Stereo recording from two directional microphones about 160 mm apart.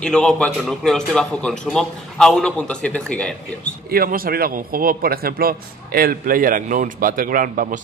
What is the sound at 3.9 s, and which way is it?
A man's voice, 65° right (ahead or behind).